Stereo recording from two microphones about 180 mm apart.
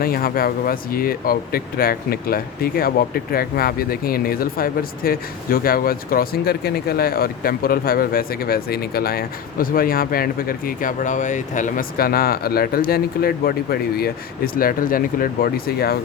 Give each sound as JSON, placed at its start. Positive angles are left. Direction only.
{"t": 0.0, "sound": "speech", "side_deg": 55}